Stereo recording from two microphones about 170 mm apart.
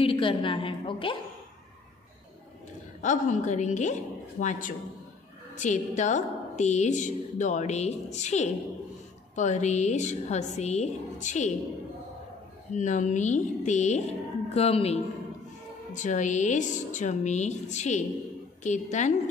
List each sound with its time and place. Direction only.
0.0 s a woman's voice: 30° left (ahead or behind)
3.0 s a woman's voice: 45° left (ahead or behind)
12.7 s a woman's voice: 45° left (ahead or behind)
15.9 s a woman's voice: 50° left (ahead or behind)